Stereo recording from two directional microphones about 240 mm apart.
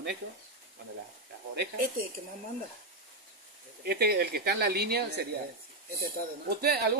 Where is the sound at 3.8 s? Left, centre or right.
Right.